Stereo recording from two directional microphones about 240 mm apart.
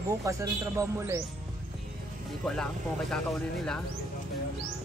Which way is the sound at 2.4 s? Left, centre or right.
Centre.